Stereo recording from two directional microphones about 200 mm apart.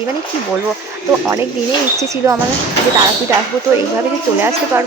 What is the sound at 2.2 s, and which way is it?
Speech, 15° right (ahead or behind).